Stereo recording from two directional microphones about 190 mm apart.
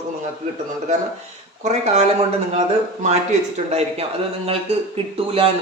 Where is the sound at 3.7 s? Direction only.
30° right (ahead or behind).